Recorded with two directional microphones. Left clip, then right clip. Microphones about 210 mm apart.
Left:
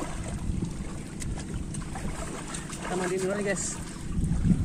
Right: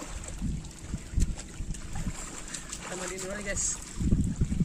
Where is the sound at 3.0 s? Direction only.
35° right (ahead or behind).